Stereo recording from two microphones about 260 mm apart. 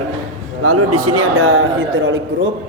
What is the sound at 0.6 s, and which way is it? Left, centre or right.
A man's voice, right.